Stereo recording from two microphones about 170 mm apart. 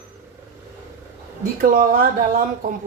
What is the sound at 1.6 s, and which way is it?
Speech, 55° right (ahead or behind).